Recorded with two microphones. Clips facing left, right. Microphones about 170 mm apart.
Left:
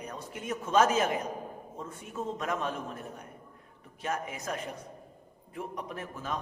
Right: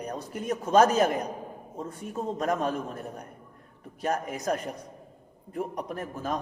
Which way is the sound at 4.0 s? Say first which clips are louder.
Right 5 dB; 40° right (ahead or behind).